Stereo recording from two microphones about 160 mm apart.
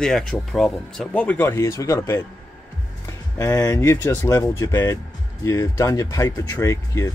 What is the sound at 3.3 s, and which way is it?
Speech, 20° left (ahead or behind).